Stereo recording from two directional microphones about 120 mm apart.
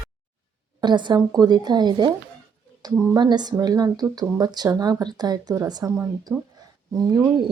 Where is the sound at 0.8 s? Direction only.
40° right (ahead or behind); by 6.4 s 20° right (ahead or behind).